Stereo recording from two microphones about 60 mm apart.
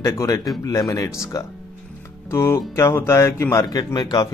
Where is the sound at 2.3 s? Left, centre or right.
Left.